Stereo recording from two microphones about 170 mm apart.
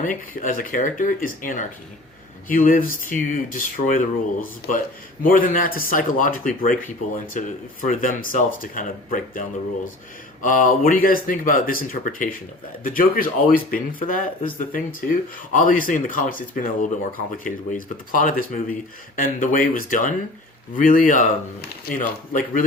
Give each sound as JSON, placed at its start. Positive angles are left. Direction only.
{"t": 0.0, "sound": "speech", "side_deg": 55}